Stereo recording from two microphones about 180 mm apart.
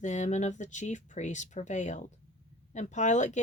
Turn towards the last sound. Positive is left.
turn(degrees=40)  # may be behind; listen again after turning